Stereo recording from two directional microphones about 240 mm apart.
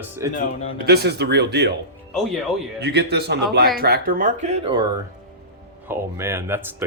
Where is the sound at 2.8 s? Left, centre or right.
Right.